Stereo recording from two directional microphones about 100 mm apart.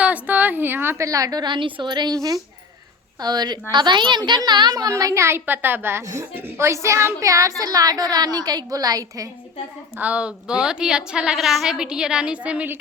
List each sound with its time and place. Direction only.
0.0 s a woman's voice: 15° right (ahead or behind); by 9.3 s 35° right (ahead or behind)
9.9 s a woman's voice: 15° right (ahead or behind)